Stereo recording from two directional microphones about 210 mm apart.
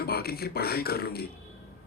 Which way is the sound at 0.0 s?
45° left (ahead or behind).